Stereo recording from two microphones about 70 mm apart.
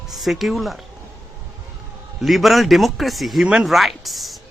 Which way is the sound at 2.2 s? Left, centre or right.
Centre.